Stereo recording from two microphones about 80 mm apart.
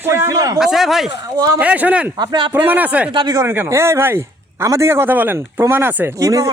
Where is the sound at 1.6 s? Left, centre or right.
Centre.